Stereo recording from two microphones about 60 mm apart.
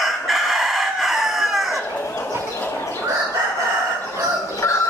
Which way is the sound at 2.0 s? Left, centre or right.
Left.